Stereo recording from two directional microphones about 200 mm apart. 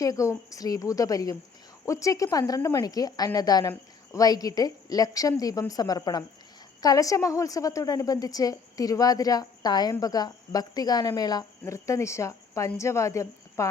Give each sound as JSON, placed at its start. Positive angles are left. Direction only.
{"t": 0.0, "sound": "a woman's voice", "side_deg": 15}